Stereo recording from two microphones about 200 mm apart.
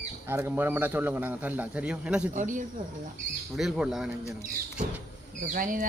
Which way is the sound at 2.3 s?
40° right (ahead or behind).